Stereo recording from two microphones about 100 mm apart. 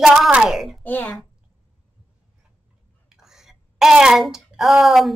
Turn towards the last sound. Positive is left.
turn(degrees=-5)  # may be behind; listen again after turning